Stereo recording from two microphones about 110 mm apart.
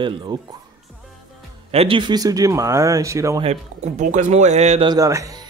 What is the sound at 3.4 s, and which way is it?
Speech, 80° right.